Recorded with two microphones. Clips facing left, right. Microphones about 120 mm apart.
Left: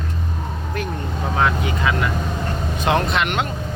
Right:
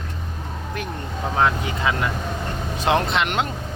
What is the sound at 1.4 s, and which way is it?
Speech, 25° right (ahead or behind).